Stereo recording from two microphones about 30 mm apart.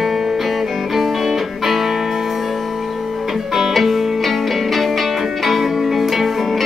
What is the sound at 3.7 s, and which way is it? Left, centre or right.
Music, centre.